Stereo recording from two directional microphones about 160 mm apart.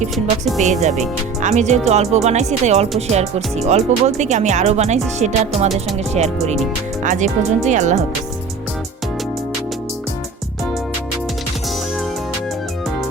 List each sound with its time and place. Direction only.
0.6 s speech: 45° right (ahead or behind)